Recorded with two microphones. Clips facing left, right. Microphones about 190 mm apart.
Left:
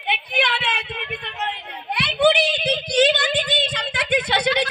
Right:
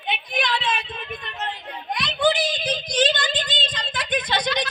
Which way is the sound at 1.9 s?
65° left (ahead or behind).